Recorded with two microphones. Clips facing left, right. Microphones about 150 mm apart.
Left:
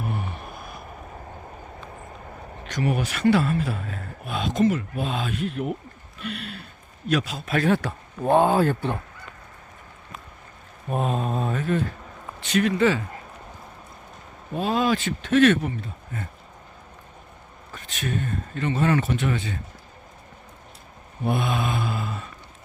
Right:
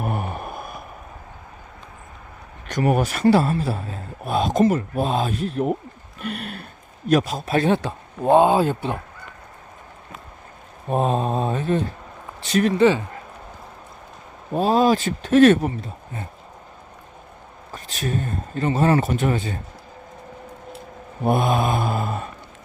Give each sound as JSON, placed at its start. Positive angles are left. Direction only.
{"t": 0.0, "sound": "a sound", "side_deg": -55}
{"t": 2.6, "sound": "speech", "side_deg": -50}
{"t": 6.2, "sound": "mantra", "side_deg": -50}
{"t": 7.1, "sound": "speech", "side_deg": -40}
{"t": 10.8, "sound": "speech", "side_deg": -35}
{"t": 12.8, "sound": "speech", "side_deg": -25}
{"t": 14.5, "sound": "speech", "side_deg": -35}
{"t": 17.7, "sound": "speech", "side_deg": -35}
{"t": 21.2, "sound": "mantra", "side_deg": -45}